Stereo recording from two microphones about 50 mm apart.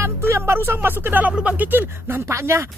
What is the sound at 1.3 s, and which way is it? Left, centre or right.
Speech, right.